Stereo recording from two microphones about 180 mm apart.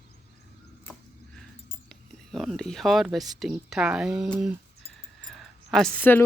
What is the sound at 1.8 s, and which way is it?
Speech, centre (ahead or behind).